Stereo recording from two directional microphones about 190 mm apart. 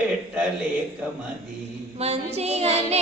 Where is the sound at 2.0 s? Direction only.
35° right (ahead or behind).